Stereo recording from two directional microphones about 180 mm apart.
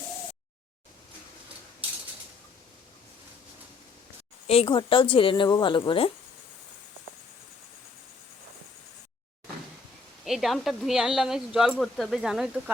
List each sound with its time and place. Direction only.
4.4 s speech: 30° left (ahead or behind)
10.2 s speech: centre (ahead or behind)